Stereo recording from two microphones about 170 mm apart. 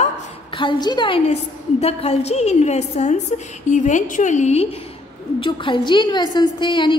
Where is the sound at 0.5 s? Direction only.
25° left (ahead or behind); by 4.6 s 45° left (ahead or behind).